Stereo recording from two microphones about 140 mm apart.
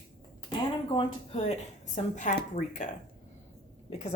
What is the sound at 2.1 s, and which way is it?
Speech, 65° left (ahead or behind).